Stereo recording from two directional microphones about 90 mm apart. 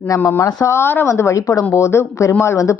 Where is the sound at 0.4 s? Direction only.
35° left (ahead or behind).